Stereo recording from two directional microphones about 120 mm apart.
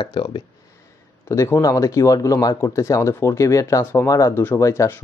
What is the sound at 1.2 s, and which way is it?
Speech, 20° left (ahead or behind).